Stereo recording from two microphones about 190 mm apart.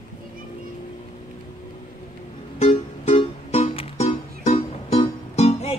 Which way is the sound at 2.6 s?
35° left (ahead or behind).